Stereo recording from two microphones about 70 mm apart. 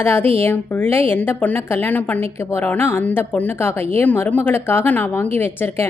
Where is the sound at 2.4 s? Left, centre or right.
Left.